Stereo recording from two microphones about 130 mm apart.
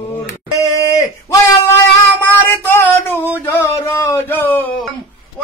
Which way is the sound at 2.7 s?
15° left (ahead or behind).